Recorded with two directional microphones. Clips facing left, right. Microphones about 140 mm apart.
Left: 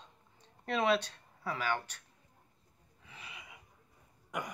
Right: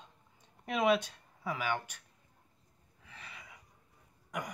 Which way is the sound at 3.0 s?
5° left (ahead or behind).